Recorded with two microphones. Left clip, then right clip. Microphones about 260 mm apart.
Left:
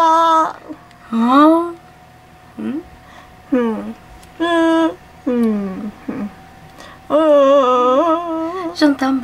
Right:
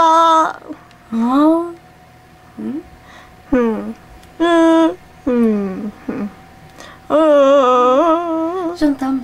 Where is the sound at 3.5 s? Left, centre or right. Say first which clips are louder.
Right 2 dB; centre.